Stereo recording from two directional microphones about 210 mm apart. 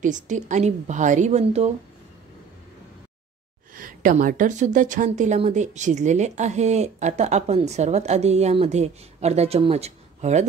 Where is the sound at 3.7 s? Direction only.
40° right (ahead or behind).